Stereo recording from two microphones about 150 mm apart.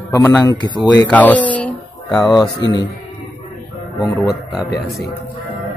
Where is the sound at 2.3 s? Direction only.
30° left (ahead or behind).